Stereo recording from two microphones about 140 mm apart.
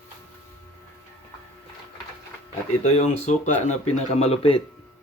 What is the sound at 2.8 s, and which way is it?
Speech, 55° left (ahead or behind).